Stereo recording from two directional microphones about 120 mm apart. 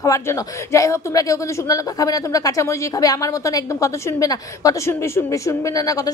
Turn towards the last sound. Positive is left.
turn(degrees=30)  # may be behind; listen again after turning